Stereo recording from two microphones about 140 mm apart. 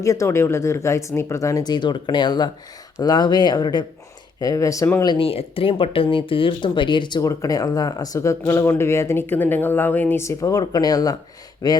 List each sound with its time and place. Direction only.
0.0 s speech: 20° left (ahead or behind)
5.0 s speech: 40° left (ahead or behind)